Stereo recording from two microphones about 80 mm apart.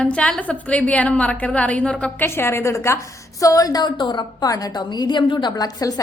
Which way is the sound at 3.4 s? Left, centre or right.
Left.